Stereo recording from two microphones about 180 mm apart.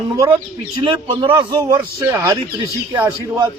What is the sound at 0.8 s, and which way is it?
Speech, 25° right (ahead or behind).